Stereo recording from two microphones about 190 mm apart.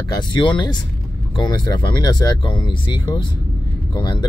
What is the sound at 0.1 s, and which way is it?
Speech, 25° left (ahead or behind).